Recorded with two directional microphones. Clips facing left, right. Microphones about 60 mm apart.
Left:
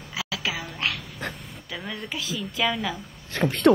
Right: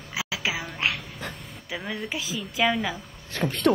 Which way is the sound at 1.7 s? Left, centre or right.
Centre.